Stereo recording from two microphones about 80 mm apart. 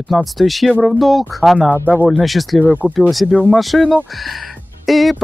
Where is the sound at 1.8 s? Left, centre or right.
Centre.